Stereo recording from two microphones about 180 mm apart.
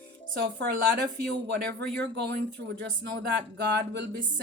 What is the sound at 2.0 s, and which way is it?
A woman's voice, 70° right (ahead or behind).